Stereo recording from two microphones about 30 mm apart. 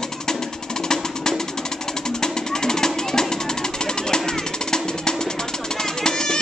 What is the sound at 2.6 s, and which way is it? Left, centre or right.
Music, left.